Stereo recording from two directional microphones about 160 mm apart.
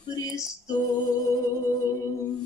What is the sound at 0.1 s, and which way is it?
Female singing, 25° left (ahead or behind).